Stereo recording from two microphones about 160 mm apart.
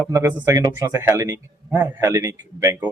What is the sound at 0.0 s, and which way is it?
A man's voice, 15° right (ahead or behind).